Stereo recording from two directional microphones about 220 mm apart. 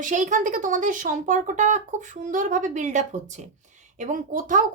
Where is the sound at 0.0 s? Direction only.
35° right (ahead or behind).